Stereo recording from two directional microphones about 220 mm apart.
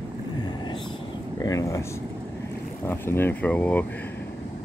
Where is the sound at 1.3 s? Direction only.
15° left (ahead or behind).